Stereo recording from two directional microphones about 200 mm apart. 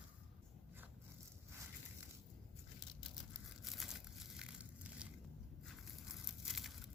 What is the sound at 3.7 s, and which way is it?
Crumpling, centre (ahead or behind).